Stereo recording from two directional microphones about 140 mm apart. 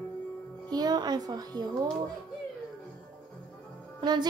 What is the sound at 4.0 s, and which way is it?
Speech, 30° right (ahead or behind).